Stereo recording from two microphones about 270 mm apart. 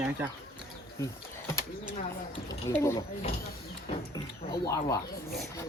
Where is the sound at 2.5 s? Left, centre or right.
Centre.